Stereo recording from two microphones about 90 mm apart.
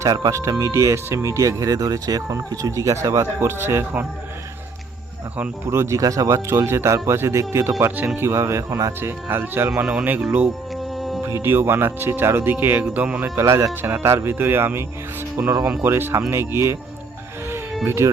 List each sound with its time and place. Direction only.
0.0 s speech: 40° right (ahead or behind)
5.7 s speech: 30° right (ahead or behind)
9.8 s speech: 15° right (ahead or behind)
10.9 s music: centre (ahead or behind)
11.2 s music: 40° right (ahead or behind)
11.4 s speech: 25° right (ahead or behind)
13.2 s speech: 30° right (ahead or behind)
17.8 s speech: 30° right (ahead or behind)